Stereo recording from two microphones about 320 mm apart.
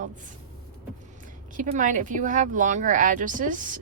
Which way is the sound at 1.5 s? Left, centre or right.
Right.